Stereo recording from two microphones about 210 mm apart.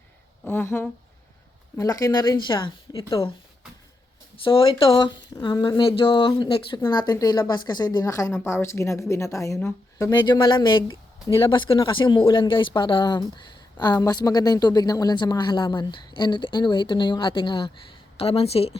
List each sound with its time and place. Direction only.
0.4 s a sound: 10° left (ahead or behind)
1.7 s a woman's voice: 15° left (ahead or behind)
4.4 s a woman's voice: 25° left (ahead or behind)